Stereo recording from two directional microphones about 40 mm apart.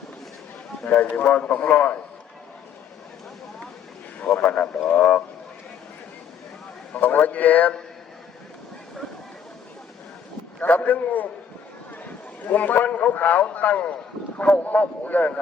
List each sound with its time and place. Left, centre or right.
0.9 s a man's voice: left
4.2 s a man's voice: left
6.9 s a man's voice: left
10.6 s a man's voice: left